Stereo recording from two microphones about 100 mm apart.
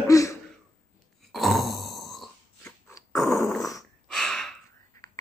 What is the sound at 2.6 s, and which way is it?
Dog, 25° left (ahead or behind).